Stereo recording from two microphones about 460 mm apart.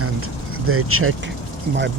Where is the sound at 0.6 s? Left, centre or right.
Right.